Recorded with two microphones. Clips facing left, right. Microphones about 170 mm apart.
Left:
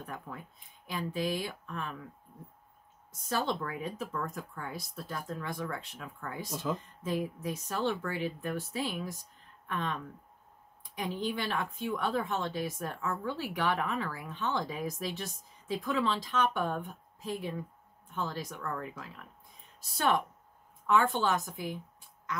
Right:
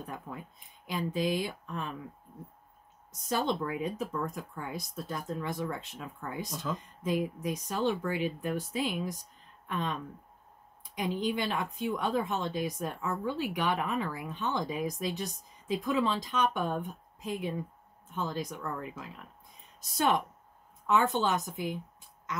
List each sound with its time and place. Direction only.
0.0 s speech: 15° right (ahead or behind)
3.1 s speech: 15° right (ahead or behind)
6.5 s speech: 10° left (ahead or behind)
6.8 s speech: 15° right (ahead or behind)